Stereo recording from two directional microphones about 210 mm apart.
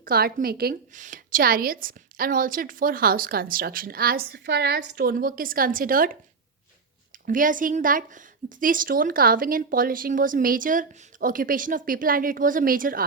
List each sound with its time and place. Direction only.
0.0 s a woman's voice: 45° right (ahead or behind)
7.3 s a woman's voice: 40° right (ahead or behind)